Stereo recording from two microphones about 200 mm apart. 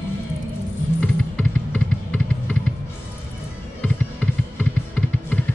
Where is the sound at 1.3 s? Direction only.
5° left (ahead or behind).